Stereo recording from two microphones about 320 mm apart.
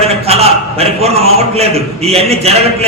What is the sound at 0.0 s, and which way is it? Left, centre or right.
A man's voice, centre.